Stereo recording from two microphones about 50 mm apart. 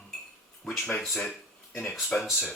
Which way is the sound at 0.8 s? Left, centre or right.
Left.